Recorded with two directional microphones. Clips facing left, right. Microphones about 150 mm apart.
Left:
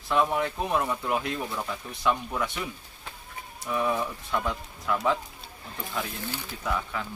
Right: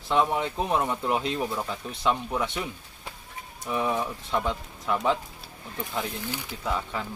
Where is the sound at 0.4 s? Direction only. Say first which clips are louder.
Right 1 dB; 20° right (ahead or behind).